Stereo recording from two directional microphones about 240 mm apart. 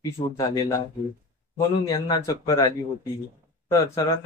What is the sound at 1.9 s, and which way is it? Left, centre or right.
Speech, centre.